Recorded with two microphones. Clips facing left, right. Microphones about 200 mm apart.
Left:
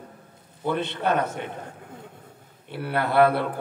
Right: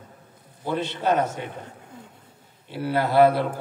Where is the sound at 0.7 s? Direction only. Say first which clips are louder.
Right 1 dB; 60° left (ahead or behind).